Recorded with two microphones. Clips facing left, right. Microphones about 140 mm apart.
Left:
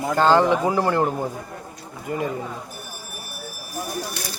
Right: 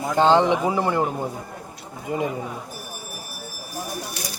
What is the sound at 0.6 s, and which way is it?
Speech, 5° right (ahead or behind).